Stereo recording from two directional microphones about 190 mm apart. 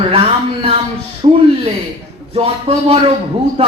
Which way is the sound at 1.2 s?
30° right (ahead or behind).